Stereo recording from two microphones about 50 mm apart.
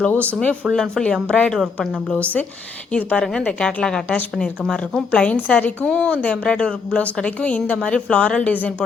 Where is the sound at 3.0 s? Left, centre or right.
Left.